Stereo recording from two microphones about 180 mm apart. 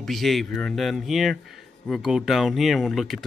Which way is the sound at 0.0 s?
Centre (ahead or behind).